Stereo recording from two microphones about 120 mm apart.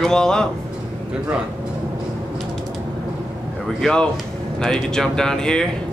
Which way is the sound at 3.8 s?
5° left (ahead or behind).